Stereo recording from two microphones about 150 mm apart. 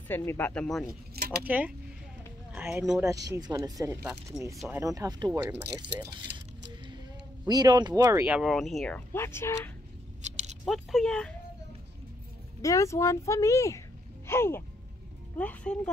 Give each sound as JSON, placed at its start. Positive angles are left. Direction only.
{"t": 0.1, "sound": "speech", "side_deg": 15}
{"t": 1.4, "sound": "speech", "side_deg": -10}
{"t": 7.4, "sound": "speech", "side_deg": -25}
{"t": 8.3, "sound": "speech", "side_deg": 0}
{"t": 10.2, "sound": "keys jangling", "side_deg": -50}
{"t": 10.6, "sound": "speech", "side_deg": 0}
{"t": 12.6, "sound": "speech", "side_deg": 20}